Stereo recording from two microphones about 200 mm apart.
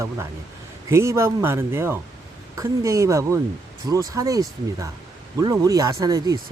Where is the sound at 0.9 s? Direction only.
15° right (ahead or behind).